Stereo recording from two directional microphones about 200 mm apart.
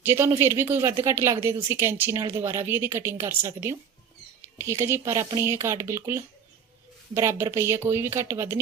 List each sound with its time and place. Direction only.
0.0 s a woman's voice: 10° right (ahead or behind)